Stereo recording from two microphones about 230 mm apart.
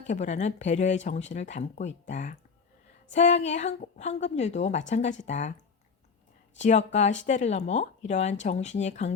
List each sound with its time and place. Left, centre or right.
0.1 s a woman's voice: left
6.6 s a woman's voice: left